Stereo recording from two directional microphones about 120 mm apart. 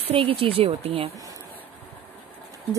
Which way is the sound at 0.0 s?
50° right (ahead or behind).